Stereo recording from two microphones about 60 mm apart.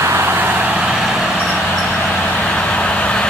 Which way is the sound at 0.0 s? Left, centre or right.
Right.